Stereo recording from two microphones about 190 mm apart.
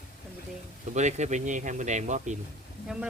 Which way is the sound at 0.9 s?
35° right (ahead or behind).